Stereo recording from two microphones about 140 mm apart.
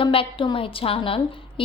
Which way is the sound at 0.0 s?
40° left (ahead or behind).